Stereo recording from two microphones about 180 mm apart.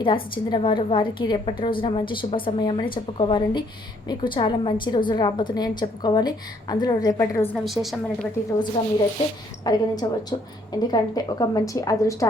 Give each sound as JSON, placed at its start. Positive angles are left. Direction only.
{"t": 0.0, "sound": "a woman's voice", "side_deg": 30}
{"t": 7.5, "sound": "a woman's voice", "side_deg": 0}
{"t": 9.6, "sound": "a woman's voice", "side_deg": 20}